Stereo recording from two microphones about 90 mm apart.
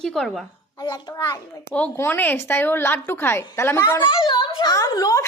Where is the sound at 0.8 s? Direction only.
55° left (ahead or behind).